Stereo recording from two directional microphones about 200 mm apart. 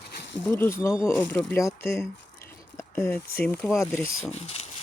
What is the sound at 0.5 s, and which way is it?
Speech, 15° left (ahead or behind).